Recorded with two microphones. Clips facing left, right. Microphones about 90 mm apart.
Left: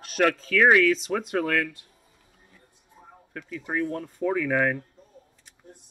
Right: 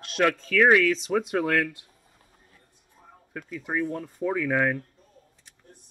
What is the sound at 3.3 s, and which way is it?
Speech, 5° right (ahead or behind).